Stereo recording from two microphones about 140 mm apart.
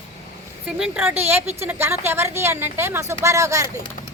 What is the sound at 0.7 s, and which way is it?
A woman's voice, 5° right (ahead or behind).